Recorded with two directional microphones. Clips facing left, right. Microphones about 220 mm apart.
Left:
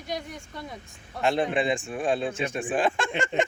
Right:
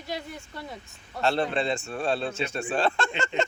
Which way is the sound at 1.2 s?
15° left (ahead or behind).